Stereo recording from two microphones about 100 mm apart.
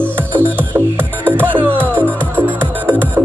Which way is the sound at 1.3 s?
20° right (ahead or behind).